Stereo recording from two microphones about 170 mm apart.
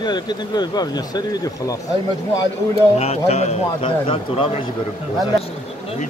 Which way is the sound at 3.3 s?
40° left (ahead or behind).